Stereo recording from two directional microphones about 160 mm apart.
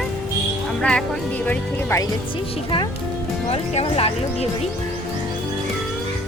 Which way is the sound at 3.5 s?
35° left (ahead or behind).